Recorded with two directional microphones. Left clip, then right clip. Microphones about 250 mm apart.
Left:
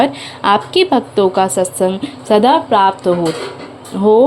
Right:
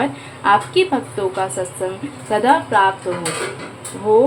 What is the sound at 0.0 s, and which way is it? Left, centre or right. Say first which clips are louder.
A woman's voice: left 5 dB; left.